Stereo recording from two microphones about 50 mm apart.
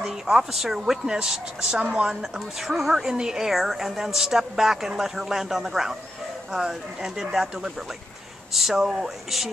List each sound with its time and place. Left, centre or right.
0.0 s a woman's voice: centre
1.8 s a woman's voice: right
2.0 s a woman's voice: centre
8.5 s a woman's voice: centre